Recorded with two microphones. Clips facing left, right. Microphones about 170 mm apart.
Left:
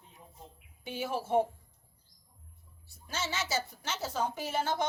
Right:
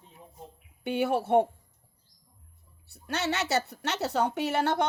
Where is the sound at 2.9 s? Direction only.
65° right (ahead or behind).